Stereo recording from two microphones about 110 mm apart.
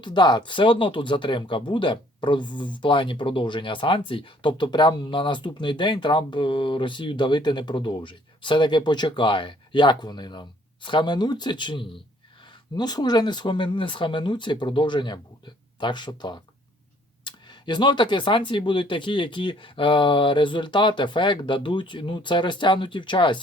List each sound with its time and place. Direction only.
0.0 s speech: 40° left (ahead or behind)